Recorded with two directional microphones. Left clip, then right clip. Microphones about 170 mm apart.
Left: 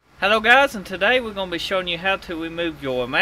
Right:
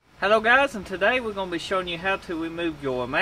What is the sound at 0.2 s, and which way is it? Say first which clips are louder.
Speech: left 4 dB; 25° left (ahead or behind).